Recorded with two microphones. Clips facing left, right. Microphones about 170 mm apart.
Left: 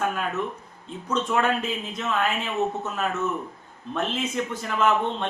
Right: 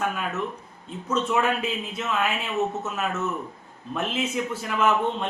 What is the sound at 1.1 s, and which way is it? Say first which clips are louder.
Speech: even; 5° right (ahead or behind).